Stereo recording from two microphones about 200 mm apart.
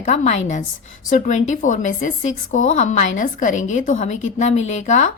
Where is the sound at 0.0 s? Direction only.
35° left (ahead or behind).